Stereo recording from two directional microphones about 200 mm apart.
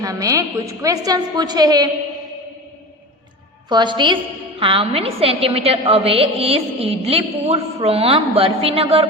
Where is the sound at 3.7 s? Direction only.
25° right (ahead or behind).